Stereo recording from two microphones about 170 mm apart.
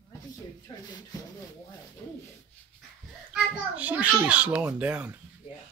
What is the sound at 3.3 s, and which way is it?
A child's voice, 10° right (ahead or behind).